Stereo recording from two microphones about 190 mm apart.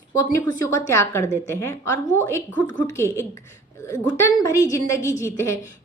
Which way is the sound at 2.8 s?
15° left (ahead or behind).